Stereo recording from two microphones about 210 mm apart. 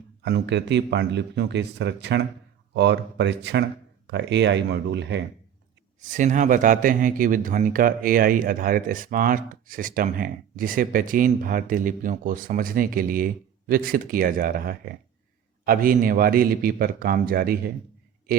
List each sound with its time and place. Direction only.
0.2 s speech: 55° right (ahead or behind)
6.0 s a man's voice: 35° right (ahead or behind)